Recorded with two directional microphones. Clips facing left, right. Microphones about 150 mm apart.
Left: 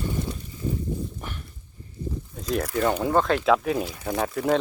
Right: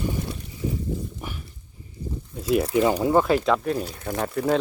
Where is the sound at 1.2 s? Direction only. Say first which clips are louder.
Right 2 dB; 10° right (ahead or behind).